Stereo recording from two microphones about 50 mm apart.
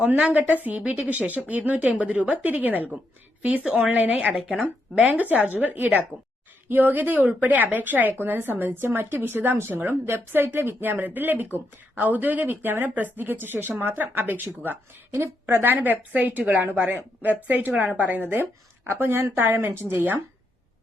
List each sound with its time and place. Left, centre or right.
0.3 s a woman's voice: right
18.9 s a woman's voice: right